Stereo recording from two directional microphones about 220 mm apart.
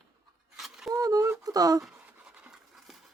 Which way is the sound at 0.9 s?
15° right (ahead or behind).